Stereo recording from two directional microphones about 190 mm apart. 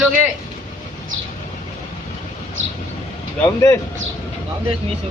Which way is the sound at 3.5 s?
15° left (ahead or behind).